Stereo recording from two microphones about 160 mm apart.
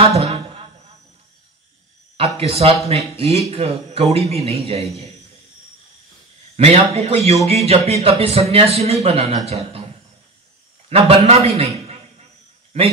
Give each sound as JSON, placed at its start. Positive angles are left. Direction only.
{"t": 0.0, "sound": "a sound", "side_deg": -40}
{"t": 2.1, "sound": "a man's voice", "side_deg": -40}
{"t": 6.5, "sound": "a man's voice", "side_deg": -40}
{"t": 10.9, "sound": "a man's voice", "side_deg": -40}